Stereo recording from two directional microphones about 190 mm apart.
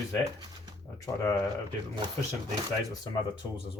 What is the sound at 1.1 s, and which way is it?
Speech, 15° left (ahead or behind).